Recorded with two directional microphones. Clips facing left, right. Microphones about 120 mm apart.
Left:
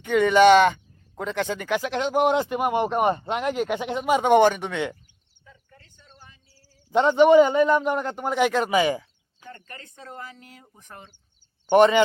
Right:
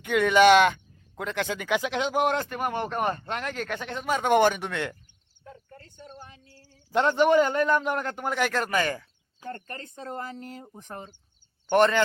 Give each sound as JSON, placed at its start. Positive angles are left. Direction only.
{"t": 0.0, "sound": "speech", "side_deg": -5}
{"t": 2.3, "sound": "speech", "side_deg": 10}
{"t": 4.2, "sound": "speech", "side_deg": 0}
{"t": 5.4, "sound": "a sound", "side_deg": -45}
{"t": 6.8, "sound": "speech", "side_deg": 0}
{"t": 9.5, "sound": "speech", "side_deg": -50}
{"t": 9.7, "sound": "speech", "side_deg": -30}
{"t": 11.7, "sound": "speech", "side_deg": 10}